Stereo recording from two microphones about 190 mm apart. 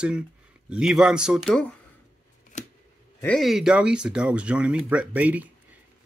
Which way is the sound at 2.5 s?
40° left (ahead or behind).